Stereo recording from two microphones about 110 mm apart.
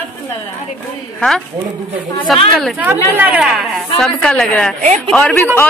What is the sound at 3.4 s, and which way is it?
Speech, centre (ahead or behind).